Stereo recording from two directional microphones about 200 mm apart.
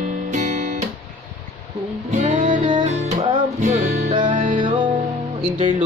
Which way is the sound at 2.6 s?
25° right (ahead or behind).